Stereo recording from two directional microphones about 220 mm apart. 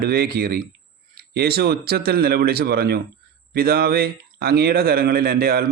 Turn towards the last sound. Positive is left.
turn(degrees=-45)  # may be behind; listen again after turning